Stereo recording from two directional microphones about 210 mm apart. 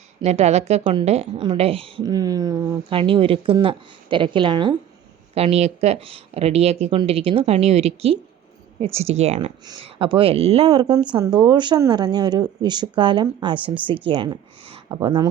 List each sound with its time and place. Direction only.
0.2 s speech: 30° right (ahead or behind)